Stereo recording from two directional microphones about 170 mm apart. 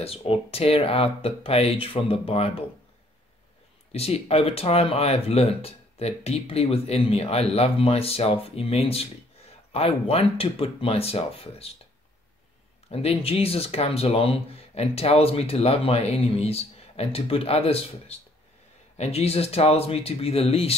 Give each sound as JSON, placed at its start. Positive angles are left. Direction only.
{"t": 0.0, "sound": "speech", "side_deg": 35}
{"t": 3.9, "sound": "speech", "side_deg": 35}
{"t": 12.9, "sound": "speech", "side_deg": 35}